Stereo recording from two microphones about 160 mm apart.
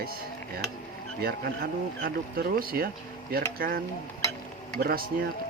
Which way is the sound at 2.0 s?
70° right (ahead or behind).